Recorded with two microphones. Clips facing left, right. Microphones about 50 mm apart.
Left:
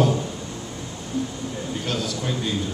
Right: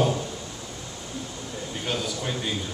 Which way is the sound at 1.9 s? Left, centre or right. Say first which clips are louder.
Left 1 dB; centre.